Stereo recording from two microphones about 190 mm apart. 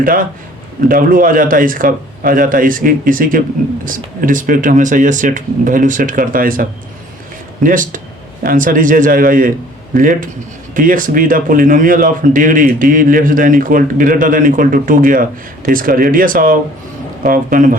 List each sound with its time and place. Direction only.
0.0 s a man's voice: 50° right (ahead or behind)